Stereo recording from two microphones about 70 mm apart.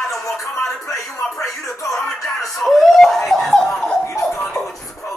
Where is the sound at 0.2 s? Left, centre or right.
Left.